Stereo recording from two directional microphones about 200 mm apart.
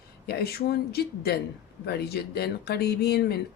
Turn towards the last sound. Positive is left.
turn(degrees=55)  # may be behind; listen again after turning